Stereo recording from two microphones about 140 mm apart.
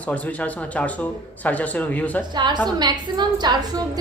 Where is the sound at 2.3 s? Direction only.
30° right (ahead or behind).